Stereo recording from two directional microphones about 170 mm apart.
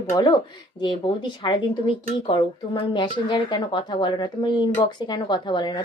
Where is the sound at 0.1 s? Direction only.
25° left (ahead or behind).